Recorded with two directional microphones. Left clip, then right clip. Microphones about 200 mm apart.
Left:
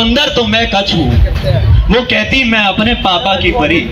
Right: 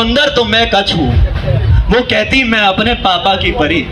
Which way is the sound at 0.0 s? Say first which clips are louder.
Even; 55° right (ahead or behind).